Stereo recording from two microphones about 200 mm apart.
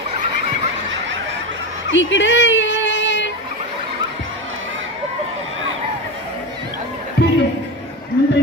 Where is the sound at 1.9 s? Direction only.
65° left (ahead or behind).